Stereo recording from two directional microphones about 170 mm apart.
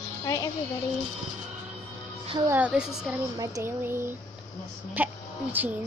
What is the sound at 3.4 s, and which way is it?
Speech, 15° right (ahead or behind).